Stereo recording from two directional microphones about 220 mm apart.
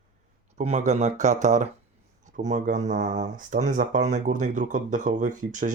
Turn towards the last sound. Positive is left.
turn(degrees=-35)  # may be behind; listen again after turning